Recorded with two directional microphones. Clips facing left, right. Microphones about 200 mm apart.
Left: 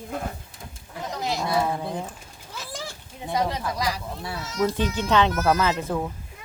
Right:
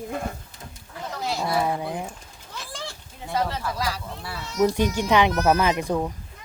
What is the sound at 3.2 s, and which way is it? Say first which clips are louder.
Speech: left 1 dB; 15° left (ahead or behind).